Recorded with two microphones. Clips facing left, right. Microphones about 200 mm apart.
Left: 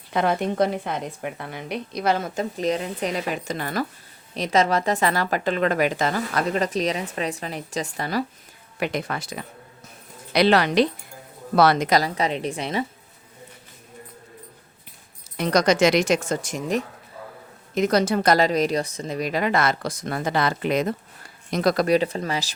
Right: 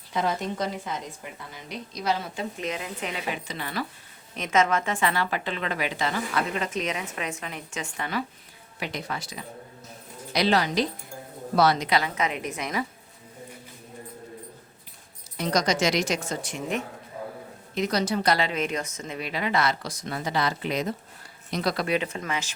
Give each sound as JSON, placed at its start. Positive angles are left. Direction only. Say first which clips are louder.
{"t": 0.1, "sound": "a woman's voice", "louder": "left 5 dB", "side_deg": 65}
{"t": 4.4, "sound": "a woman's voice", "louder": "left 3 dB", "side_deg": 35}
{"t": 8.8, "sound": "a woman's voice", "louder": "left 6 dB", "side_deg": 55}
{"t": 11.9, "sound": "a woman's voice", "louder": "left 4 dB", "side_deg": 40}
{"t": 15.4, "sound": "a woman's voice", "louder": "left 6 dB", "side_deg": 60}